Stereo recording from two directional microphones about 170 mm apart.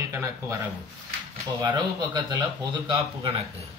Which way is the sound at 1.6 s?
25° right (ahead or behind).